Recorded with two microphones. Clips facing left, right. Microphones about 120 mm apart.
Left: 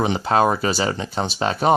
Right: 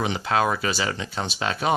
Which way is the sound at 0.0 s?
35° left (ahead or behind).